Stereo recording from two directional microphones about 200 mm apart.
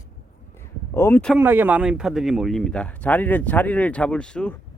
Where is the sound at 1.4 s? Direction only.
10° right (ahead or behind).